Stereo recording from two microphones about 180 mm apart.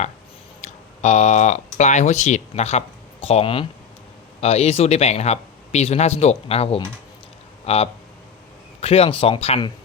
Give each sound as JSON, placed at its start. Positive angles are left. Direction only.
{"t": 0.6, "sound": "speech", "side_deg": 40}